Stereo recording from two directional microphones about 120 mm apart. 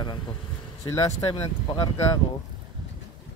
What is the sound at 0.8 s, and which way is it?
Speech, 25° left (ahead or behind).